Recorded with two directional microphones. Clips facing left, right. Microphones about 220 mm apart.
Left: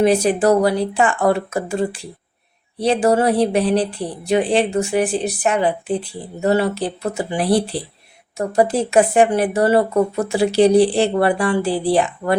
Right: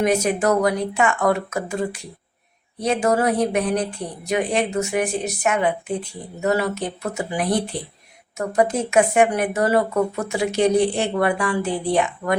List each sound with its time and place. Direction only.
0.0 s speech: 30° left (ahead or behind)